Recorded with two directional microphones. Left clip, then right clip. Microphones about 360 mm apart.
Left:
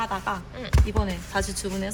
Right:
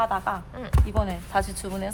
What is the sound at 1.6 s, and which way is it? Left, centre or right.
Speech, right.